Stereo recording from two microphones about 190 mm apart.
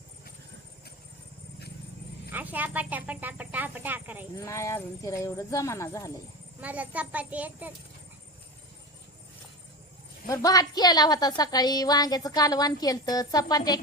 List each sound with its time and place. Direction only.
2.3 s speech: 10° right (ahead or behind)
4.4 s speech: 15° left (ahead or behind)
6.6 s speech: 10° right (ahead or behind)
10.2 s a woman's voice: 15° left (ahead or behind)